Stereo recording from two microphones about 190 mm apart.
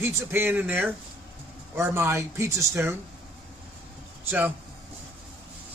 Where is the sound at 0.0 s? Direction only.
10° right (ahead or behind).